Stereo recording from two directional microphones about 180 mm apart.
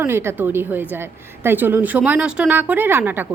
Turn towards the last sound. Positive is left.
turn(degrees=-10)  # may be behind; listen again after turning